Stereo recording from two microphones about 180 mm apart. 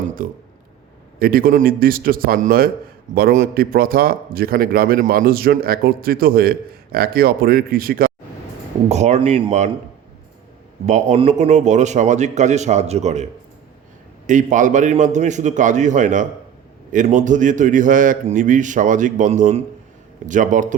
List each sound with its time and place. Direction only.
0.2 s a man's voice: 50° right (ahead or behind)
8.9 s a man's voice: 40° right (ahead or behind)
10.8 s a man's voice: 40° right (ahead or behind)
14.3 s a man's voice: 45° right (ahead or behind)